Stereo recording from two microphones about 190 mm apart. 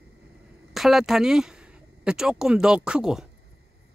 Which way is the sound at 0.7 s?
Centre (ahead or behind).